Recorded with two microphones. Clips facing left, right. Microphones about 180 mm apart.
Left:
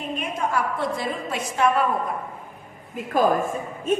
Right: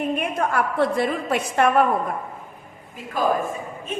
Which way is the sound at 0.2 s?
60° right (ahead or behind).